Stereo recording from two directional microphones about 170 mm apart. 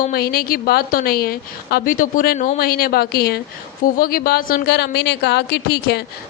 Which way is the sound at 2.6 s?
60° left (ahead or behind).